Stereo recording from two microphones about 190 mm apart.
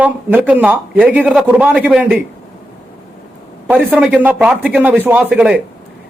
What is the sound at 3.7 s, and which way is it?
Speech, 5° right (ahead or behind).